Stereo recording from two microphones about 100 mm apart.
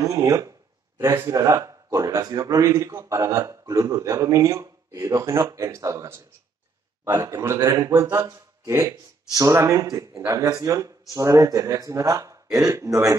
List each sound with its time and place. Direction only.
0.0 s a man's voice: 35° right (ahead or behind)